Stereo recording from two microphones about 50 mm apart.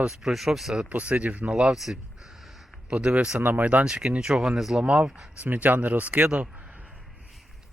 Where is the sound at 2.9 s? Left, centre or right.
Right.